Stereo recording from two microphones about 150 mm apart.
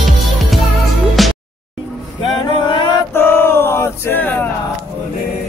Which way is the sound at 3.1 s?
15° left (ahead or behind).